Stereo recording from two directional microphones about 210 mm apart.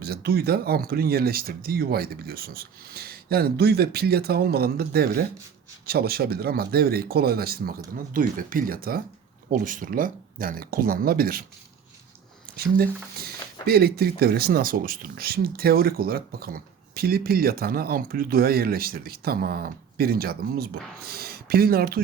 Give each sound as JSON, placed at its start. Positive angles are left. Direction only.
{"t": 0.0, "sound": "speech", "side_deg": -45}
{"t": 12.5, "sound": "speech", "side_deg": -45}